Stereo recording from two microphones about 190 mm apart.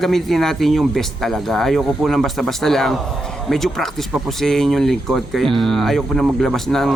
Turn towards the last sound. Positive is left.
turn(degrees=0)  # may be behind; listen again after turning